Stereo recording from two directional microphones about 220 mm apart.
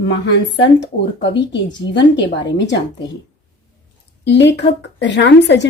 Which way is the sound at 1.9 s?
50° left (ahead or behind).